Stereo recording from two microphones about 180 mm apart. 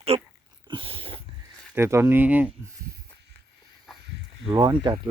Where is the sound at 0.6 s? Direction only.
30° right (ahead or behind).